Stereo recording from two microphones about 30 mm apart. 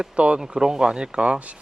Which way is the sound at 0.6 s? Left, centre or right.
Right.